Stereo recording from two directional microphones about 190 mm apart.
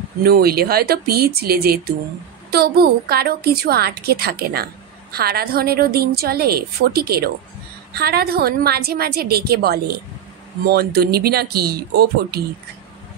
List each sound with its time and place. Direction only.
0.2 s a woman's voice: 55° right (ahead or behind)